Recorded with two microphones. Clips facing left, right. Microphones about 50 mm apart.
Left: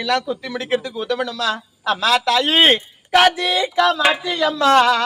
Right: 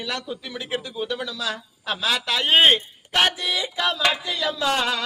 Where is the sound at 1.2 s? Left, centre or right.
Left.